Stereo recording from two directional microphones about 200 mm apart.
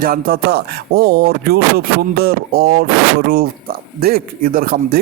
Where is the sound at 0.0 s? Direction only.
50° right (ahead or behind).